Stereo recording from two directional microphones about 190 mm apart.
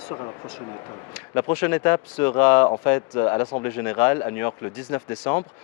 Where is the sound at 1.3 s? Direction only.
15° left (ahead or behind).